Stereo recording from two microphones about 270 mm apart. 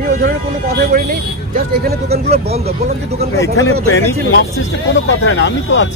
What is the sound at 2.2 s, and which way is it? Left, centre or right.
Speech, right.